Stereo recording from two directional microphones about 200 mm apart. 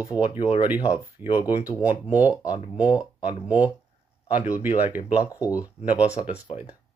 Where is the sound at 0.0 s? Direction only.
15° right (ahead or behind).